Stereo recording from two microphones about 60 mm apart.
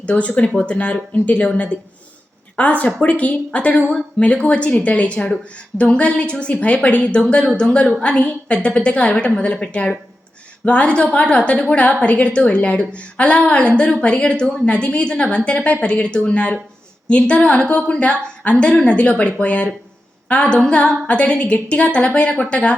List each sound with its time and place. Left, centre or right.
0.0 s a woman's voice: left